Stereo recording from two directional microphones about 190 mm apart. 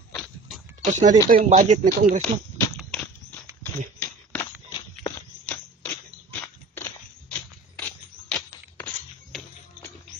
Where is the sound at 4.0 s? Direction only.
10° left (ahead or behind).